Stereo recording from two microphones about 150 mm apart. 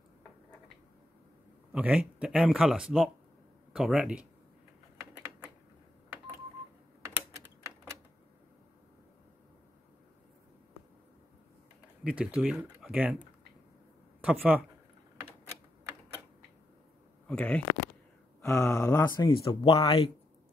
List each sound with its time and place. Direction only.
1.7 s speech: 5° right (ahead or behind)
12.0 s speech: 5° right (ahead or behind)
14.2 s speech: 10° right (ahead or behind)
17.3 s speech: 5° left (ahead or behind)
18.4 s speech: 20° left (ahead or behind)
19.4 s speech: 40° left (ahead or behind)